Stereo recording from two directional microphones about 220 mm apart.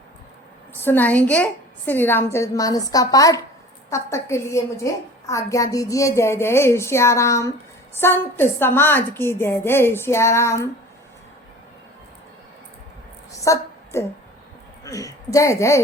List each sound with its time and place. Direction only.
0.9 s a woman's voice: 5° left (ahead or behind)
13.4 s a sound: 15° left (ahead or behind)
14.8 s a woman's voice: 15° left (ahead or behind)